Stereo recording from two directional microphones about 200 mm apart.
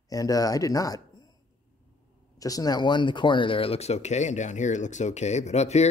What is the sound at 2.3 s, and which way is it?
Speech, 20° left (ahead or behind).